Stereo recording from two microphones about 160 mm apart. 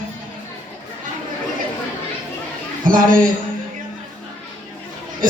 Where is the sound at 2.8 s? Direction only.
60° right (ahead or behind).